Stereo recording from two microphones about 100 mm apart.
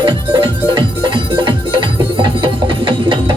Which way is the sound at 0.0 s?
50° right (ahead or behind).